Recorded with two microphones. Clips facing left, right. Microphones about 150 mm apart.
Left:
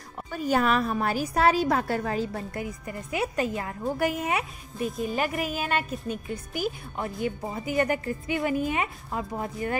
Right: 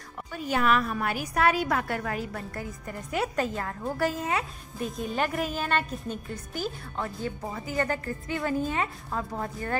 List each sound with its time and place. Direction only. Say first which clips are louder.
0.3 s a woman's voice: left 2 dB; 40° left (ahead or behind)
2.6 s a woman's voice: left 2 dB; 10° left (ahead or behind)
4.7 s a woman's voice: left 2 dB; 5° left (ahead or behind)